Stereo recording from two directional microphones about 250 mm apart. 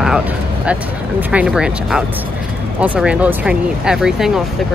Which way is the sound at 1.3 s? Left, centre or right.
Centre.